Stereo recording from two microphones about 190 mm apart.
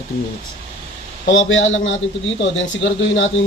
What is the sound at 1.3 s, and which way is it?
Speech, 85° left.